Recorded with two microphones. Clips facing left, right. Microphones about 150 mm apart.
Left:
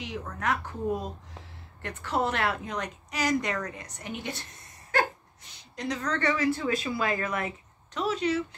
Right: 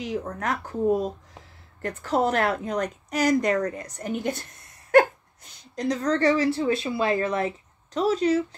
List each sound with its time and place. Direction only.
0.0 s speech: 40° right (ahead or behind)
5.8 s speech: 40° right (ahead or behind)